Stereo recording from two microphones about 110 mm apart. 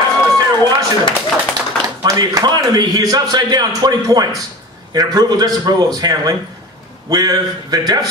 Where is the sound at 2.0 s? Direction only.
35° right (ahead or behind).